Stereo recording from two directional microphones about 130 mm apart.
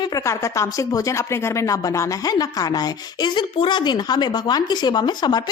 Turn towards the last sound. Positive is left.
turn(degrees=35)  # may be behind; listen again after turning